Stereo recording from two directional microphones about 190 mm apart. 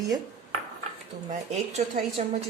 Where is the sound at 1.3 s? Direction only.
35° right (ahead or behind).